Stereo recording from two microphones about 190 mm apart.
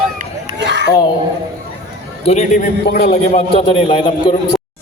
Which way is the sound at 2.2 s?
35° left (ahead or behind).